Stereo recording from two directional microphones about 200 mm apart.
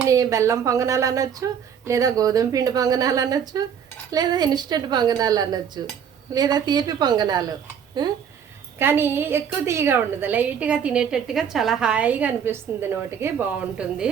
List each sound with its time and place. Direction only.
0.1 s a woman's voice: 15° right (ahead or behind)
8.8 s a woman's voice: 10° right (ahead or behind)